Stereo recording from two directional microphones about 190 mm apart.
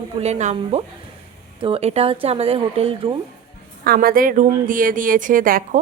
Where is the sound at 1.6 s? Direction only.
30° right (ahead or behind).